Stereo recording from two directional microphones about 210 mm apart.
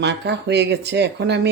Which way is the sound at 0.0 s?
55° right (ahead or behind).